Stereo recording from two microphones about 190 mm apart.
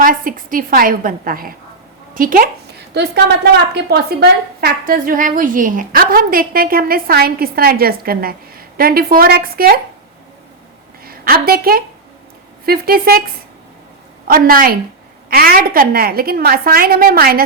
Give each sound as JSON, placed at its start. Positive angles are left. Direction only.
{"t": 0.0, "sound": "a woman's voice", "side_deg": -45}
{"t": 2.9, "sound": "a woman's voice", "side_deg": -60}
{"t": 11.0, "sound": "a woman's voice", "side_deg": -50}
{"t": 14.3, "sound": "a woman's voice", "side_deg": -50}